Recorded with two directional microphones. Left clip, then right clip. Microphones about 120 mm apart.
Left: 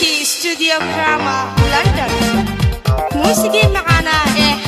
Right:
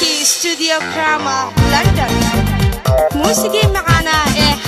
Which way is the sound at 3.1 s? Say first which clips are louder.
Left 1 dB; 25° left (ahead or behind).